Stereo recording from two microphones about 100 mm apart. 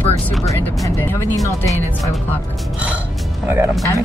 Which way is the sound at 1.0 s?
20° left (ahead or behind).